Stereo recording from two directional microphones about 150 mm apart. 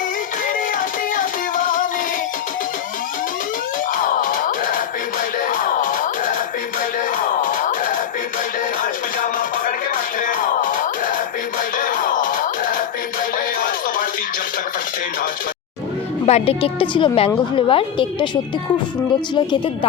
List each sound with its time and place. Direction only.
0.4 s music: 65° left (ahead or behind)
3.9 s music: 65° left (ahead or behind)
16.2 s a woman's voice: 40° left (ahead or behind)
19.3 s a woman's voice: 30° left (ahead or behind)